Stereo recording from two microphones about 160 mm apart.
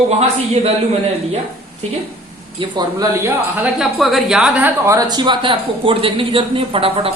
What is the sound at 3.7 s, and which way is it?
Speech, centre (ahead or behind).